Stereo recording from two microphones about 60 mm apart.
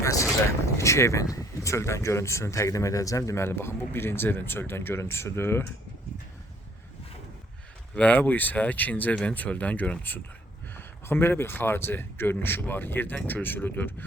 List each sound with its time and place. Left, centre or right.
0.0 s vehicle: left
0.4 s speech: left
3.4 s speech: left
7.9 s speech: left
10.8 s speech: left